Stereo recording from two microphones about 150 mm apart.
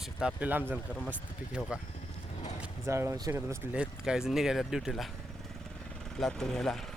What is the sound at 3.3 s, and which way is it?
Speech, 10° right (ahead or behind).